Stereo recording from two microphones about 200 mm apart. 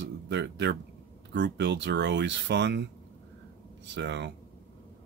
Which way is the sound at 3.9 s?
60° right (ahead or behind).